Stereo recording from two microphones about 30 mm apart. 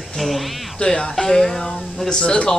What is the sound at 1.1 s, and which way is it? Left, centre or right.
Speech, centre.